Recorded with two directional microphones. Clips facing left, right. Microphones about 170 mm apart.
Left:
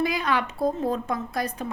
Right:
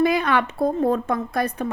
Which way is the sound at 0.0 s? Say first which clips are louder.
Right 6 dB; 60° right (ahead or behind).